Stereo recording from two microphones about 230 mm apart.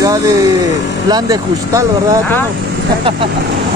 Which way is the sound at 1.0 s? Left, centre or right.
Centre.